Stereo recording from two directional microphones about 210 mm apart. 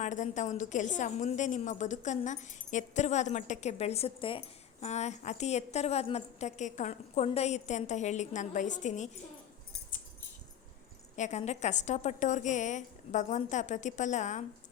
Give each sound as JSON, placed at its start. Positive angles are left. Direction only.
{"t": 0.0, "sound": "a woman's voice", "side_deg": 35}
{"t": 11.2, "sound": "a woman's voice", "side_deg": 35}